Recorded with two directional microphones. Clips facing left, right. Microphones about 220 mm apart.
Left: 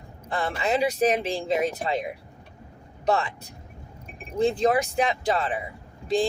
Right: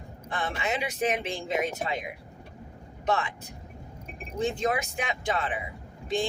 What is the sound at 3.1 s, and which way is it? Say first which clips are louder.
Speech: left 4 dB; 35° left (ahead or behind).